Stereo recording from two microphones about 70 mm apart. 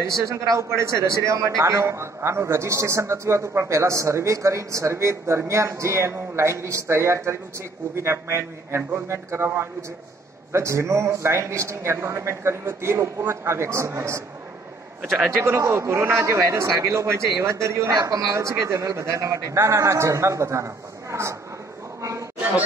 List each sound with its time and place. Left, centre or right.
0.1 s a man's voice: right
15.3 s a man's voice: right